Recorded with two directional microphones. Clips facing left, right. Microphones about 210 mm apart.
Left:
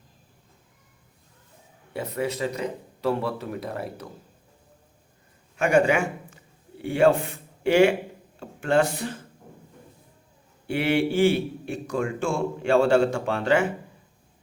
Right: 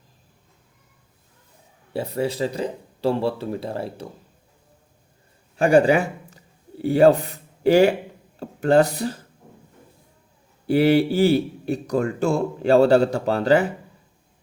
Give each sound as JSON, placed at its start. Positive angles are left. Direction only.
{"t": 1.9, "sound": "a man's voice", "side_deg": -30}
{"t": 5.5, "sound": "a man's voice", "side_deg": -35}
{"t": 10.7, "sound": "a man's voice", "side_deg": -35}